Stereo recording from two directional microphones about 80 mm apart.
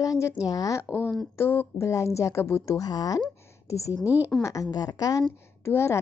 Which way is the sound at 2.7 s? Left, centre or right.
Left.